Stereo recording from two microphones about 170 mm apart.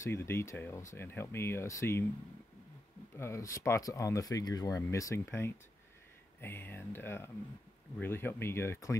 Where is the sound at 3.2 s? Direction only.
15° left (ahead or behind).